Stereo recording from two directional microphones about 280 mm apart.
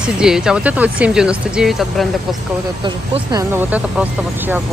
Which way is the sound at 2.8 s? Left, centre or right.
Centre.